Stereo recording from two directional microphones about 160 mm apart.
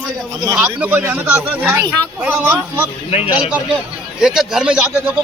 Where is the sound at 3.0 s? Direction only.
40° left (ahead or behind).